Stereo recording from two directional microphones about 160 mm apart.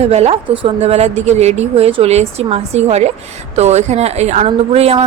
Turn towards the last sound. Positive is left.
turn(degrees=-40)  # may be behind; listen again after turning